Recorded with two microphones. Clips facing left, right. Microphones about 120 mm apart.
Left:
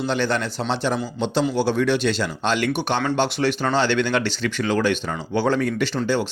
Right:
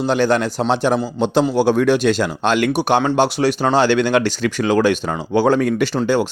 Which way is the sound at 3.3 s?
35° right (ahead or behind).